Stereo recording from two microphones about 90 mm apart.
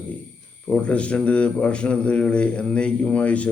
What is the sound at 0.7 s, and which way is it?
Speech, 15° left (ahead or behind).